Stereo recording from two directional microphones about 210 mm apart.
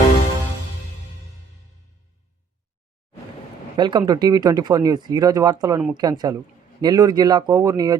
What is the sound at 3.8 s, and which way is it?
Speech, 20° right (ahead or behind).